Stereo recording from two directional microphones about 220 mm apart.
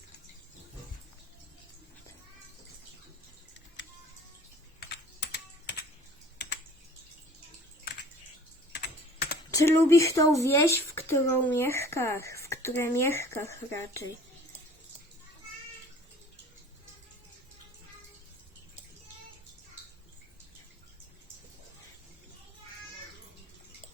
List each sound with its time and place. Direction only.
4.8 s typing: 50° left (ahead or behind)
8.7 s typing: 45° left (ahead or behind)
9.5 s speech: 15° left (ahead or behind)